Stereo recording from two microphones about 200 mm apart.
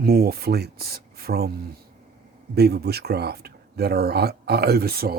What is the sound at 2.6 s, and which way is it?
Speech, 55° right (ahead or behind).